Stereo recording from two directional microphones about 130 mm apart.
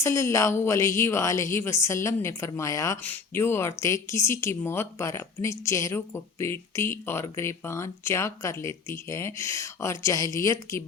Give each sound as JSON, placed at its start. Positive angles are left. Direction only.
{"t": 0.0, "sound": "speech", "side_deg": 20}